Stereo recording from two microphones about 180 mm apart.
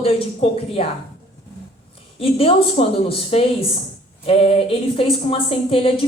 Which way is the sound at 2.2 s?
30° left (ahead or behind).